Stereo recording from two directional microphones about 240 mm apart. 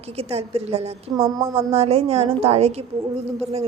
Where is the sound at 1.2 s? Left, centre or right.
Centre.